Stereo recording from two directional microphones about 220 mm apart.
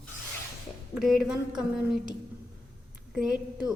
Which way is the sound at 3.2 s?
5° right (ahead or behind).